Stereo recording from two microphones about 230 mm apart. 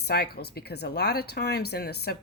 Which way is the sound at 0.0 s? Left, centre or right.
Left.